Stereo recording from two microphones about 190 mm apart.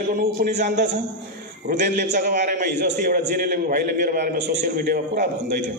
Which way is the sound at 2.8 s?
55° right (ahead or behind).